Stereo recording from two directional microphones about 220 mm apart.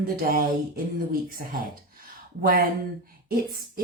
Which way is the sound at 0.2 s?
40° right (ahead or behind).